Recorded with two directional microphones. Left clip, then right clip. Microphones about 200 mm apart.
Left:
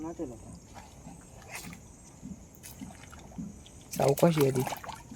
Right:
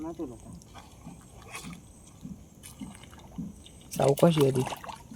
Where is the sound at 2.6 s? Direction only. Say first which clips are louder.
Right 2 dB; 5° right (ahead or behind).